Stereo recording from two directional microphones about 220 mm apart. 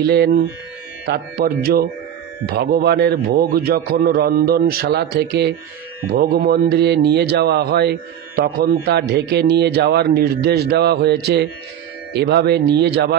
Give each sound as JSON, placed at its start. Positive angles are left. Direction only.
{"t": 0.1, "sound": "speech", "side_deg": -50}